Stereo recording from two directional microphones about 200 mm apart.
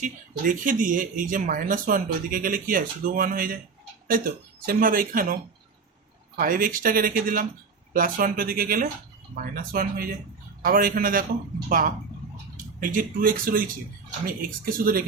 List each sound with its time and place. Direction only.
0.0 s speech: 40° right (ahead or behind)